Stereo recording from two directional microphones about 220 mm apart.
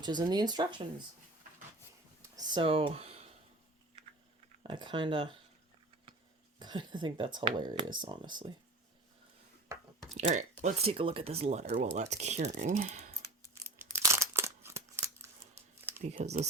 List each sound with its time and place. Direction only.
0.0 s speech: 20° right (ahead or behind)
2.3 s speech: 20° right (ahead or behind)
4.6 s speech: 20° right (ahead or behind)
6.6 s speech: 20° right (ahead or behind)
10.2 s speech: 30° right (ahead or behind)
13.7 s a sound: 10° right (ahead or behind)
16.0 s speech: 30° right (ahead or behind)